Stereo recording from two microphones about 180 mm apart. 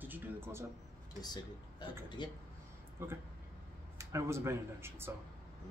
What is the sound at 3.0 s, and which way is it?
Speech, 15° right (ahead or behind).